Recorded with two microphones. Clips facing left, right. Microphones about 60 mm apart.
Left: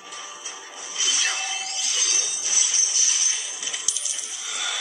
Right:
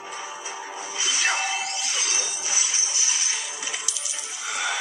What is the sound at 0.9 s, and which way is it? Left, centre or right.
Television, right.